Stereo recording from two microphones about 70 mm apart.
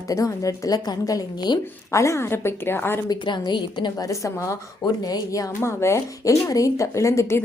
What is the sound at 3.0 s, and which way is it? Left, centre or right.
A woman's voice, left.